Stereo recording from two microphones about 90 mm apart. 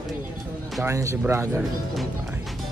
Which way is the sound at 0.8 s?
35° right (ahead or behind).